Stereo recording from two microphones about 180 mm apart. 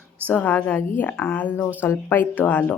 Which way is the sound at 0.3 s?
10° left (ahead or behind).